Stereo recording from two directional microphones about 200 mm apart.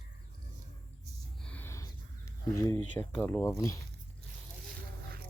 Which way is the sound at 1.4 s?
5° left (ahead or behind).